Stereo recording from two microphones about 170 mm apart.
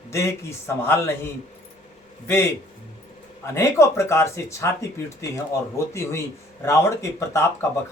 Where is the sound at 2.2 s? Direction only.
15° left (ahead or behind).